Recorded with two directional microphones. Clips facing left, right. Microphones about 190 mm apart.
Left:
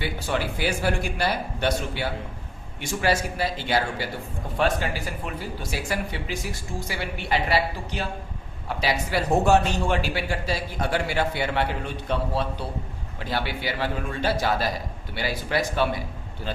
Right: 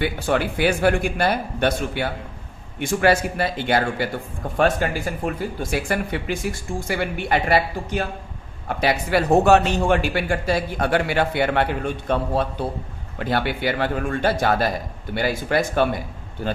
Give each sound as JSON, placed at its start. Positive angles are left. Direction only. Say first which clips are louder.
{"t": 0.0, "sound": "speech", "louder": "right 6 dB", "side_deg": -55}